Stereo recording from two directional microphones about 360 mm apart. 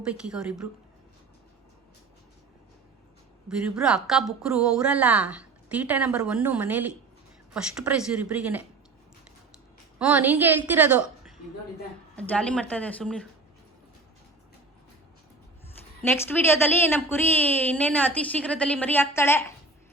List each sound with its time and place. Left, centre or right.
0.0 s a woman's voice: centre
3.5 s a woman's voice: centre
10.0 s a woman's voice: centre
12.1 s a woman's voice: centre
16.0 s a woman's voice: centre